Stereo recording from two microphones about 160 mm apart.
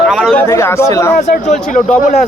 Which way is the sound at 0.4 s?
15° left (ahead or behind).